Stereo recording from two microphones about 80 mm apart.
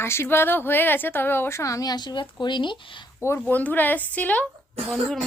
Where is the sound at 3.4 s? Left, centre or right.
Centre.